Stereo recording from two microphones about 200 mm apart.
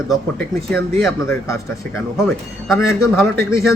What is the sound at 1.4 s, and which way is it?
Speech, 15° left (ahead or behind).